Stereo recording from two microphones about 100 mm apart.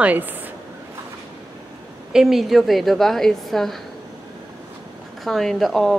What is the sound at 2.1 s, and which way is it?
A woman's voice, centre (ahead or behind).